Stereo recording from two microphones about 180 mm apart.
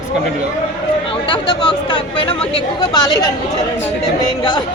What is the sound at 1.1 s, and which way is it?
Chatter, 25° left (ahead or behind).